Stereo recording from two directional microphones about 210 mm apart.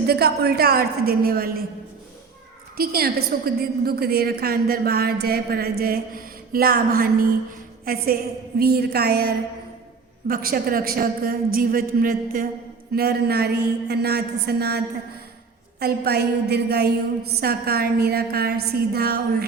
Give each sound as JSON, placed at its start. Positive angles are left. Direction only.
{"t": 0.1, "sound": "a woman's voice", "side_deg": -50}
{"t": 2.7, "sound": "a woman's voice", "side_deg": -45}
{"t": 15.8, "sound": "a woman's voice", "side_deg": -50}